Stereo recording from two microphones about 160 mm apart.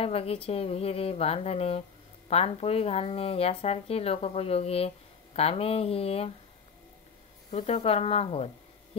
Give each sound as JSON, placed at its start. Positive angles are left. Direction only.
{"t": 0.0, "sound": "speech", "side_deg": 35}
{"t": 7.5, "sound": "speech", "side_deg": 40}